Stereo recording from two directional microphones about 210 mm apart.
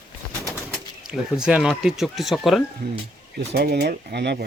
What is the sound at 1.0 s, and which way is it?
A man's voice, 5° right (ahead or behind).